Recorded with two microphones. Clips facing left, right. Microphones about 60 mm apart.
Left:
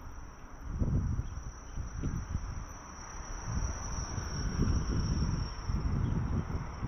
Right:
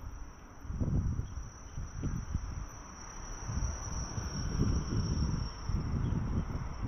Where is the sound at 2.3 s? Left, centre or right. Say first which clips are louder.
Left 1 dB; centre.